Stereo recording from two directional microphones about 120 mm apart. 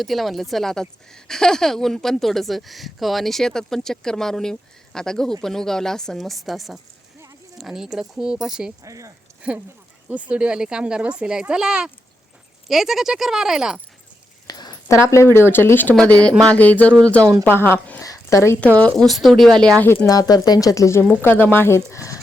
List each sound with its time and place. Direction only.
0.0 s speech: centre (ahead or behind)
8.8 s speech: 25° right (ahead or behind)
9.4 s speech: 10° right (ahead or behind)
14.4 s speech: 30° left (ahead or behind)
18.0 s a sound: 30° left (ahead or behind)
18.8 s speech: 5° left (ahead or behind)
19.8 s speech: 15° left (ahead or behind)
20.1 s speech: 30° left (ahead or behind)